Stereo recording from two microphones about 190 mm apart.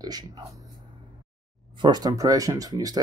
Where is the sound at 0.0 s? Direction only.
20° right (ahead or behind).